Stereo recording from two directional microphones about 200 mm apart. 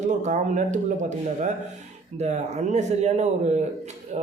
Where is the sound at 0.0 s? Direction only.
35° right (ahead or behind).